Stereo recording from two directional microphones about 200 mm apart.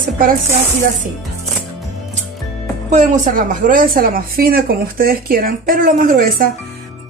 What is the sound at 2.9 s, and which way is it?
A woman's voice, 40° right (ahead or behind).